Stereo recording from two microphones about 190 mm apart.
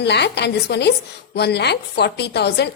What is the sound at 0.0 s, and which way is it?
A woman's voice, 65° left (ahead or behind).